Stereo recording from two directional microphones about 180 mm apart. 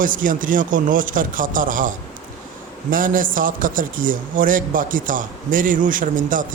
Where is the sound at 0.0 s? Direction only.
50° right (ahead or behind).